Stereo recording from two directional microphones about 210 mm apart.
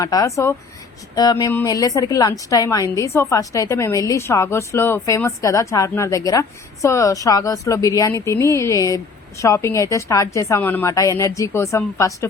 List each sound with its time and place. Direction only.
0.0 s a woman's voice: 15° left (ahead or behind)